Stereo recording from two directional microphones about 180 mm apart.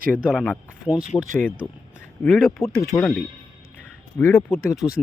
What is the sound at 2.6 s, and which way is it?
Speech, 15° left (ahead or behind).